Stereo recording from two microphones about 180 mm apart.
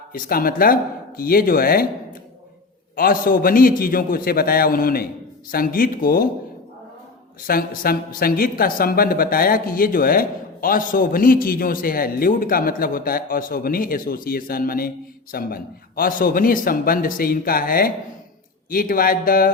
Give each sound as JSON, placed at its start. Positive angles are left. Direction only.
{"t": 0.1, "sound": "speech", "side_deg": 55}
{"t": 2.9, "sound": "a woman's voice", "side_deg": 50}
{"t": 7.4, "sound": "a woman's voice", "side_deg": 55}